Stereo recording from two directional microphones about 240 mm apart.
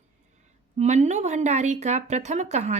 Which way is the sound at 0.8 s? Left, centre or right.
Right.